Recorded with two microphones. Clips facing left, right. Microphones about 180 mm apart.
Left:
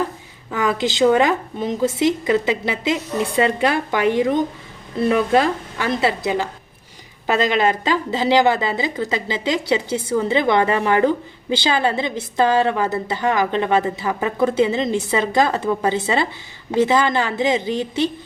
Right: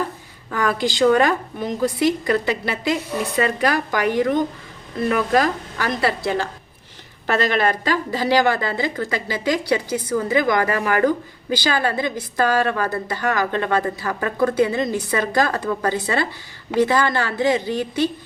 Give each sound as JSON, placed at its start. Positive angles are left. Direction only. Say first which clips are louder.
{"t": 0.5, "sound": "a woman's voice", "louder": "left 1 dB", "side_deg": 20}